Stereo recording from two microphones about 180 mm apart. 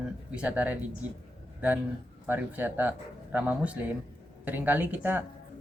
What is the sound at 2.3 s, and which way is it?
Speech, 10° right (ahead or behind).